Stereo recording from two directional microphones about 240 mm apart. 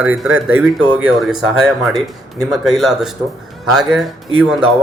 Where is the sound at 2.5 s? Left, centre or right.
Centre.